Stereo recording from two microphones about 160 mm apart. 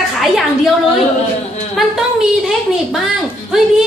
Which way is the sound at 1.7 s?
Centre (ahead or behind).